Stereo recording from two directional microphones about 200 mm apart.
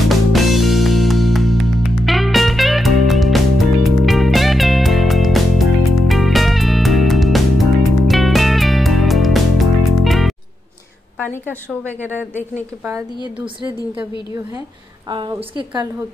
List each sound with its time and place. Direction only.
0.1 s music: centre (ahead or behind)
11.4 s a woman's voice: 10° right (ahead or behind)
15.0 s a woman's voice: 25° right (ahead or behind)